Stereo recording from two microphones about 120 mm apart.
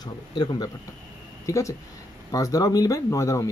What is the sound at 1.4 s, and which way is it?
Speech, 25° left (ahead or behind).